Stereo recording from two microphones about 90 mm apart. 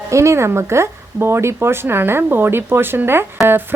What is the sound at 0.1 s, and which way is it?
A woman's voice, 35° right (ahead or behind).